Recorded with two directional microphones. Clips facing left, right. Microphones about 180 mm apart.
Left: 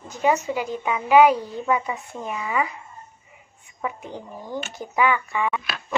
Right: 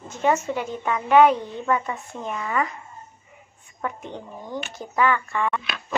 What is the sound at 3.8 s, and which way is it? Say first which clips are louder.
A woman's voice: even; 5° left (ahead or behind).